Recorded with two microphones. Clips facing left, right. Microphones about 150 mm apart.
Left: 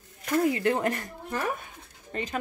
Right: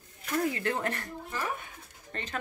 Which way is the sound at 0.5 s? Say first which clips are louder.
Left 6 dB; 15° left (ahead or behind).